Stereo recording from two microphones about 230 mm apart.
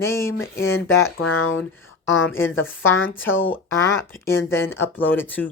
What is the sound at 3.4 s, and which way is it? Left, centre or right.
Speech, centre.